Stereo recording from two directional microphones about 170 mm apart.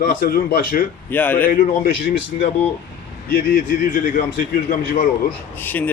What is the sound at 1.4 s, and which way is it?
Speech, 60° left (ahead or behind).